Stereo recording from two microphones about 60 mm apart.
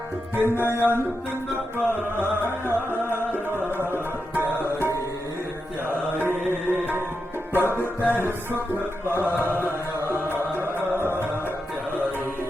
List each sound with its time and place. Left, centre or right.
0.3 s music: right
2.9 s music: left
3.8 s music: right
6.5 s music: right
7.8 s music: left
9.0 s chant: right
10.6 s music: right